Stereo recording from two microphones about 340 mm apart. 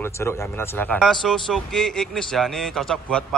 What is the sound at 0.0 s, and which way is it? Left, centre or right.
A man's voice, centre.